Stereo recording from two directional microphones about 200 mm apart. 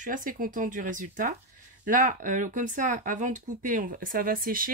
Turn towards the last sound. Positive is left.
turn(degrees=-45)  # may be behind; listen again after turning